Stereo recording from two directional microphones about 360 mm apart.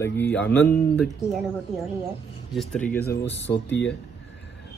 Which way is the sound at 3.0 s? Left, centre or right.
Left.